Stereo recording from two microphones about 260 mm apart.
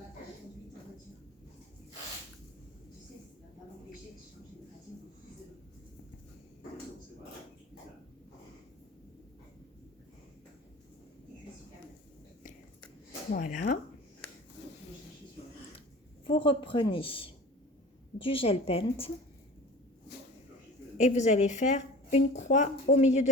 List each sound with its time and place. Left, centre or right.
13.3 s speech: left
16.2 s a sound: centre
16.9 s a woman's voice: centre
21.0 s a woman's voice: left